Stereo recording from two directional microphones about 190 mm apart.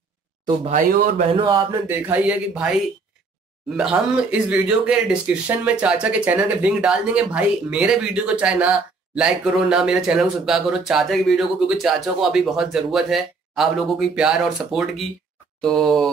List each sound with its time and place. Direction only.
0.7 s speech: 40° right (ahead or behind)
1.3 s speech: 25° right (ahead or behind)
1.9 s speech: 10° right (ahead or behind)
3.7 s speech: 5° right (ahead or behind)